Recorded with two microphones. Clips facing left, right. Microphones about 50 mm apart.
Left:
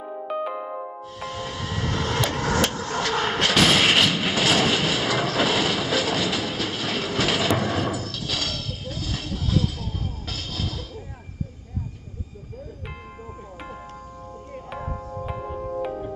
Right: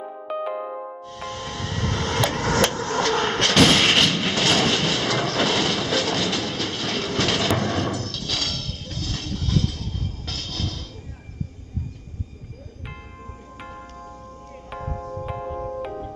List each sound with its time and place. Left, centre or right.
0.0 s music: centre
2.5 s thump: centre
10.2 s train: centre
14.7 s music: centre
15.2 s music: centre